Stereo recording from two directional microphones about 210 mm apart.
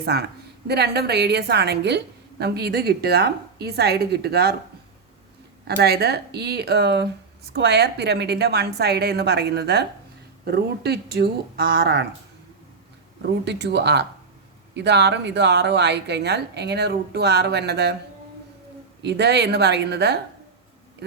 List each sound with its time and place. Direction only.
0.0 s speech: 50° right (ahead or behind)
5.6 s speech: 50° right (ahead or behind)
13.4 s speech: 55° right (ahead or behind)
19.0 s speech: 55° right (ahead or behind)